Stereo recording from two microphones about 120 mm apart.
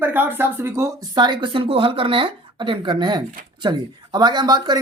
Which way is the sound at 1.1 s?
35° right (ahead or behind).